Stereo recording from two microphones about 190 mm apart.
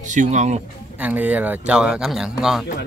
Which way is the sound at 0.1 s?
40° right (ahead or behind).